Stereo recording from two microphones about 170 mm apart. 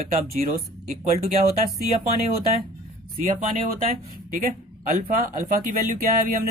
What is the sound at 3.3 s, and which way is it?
Speech, 55° right (ahead or behind).